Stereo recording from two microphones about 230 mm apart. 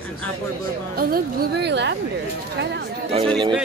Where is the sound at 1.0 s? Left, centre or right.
Right.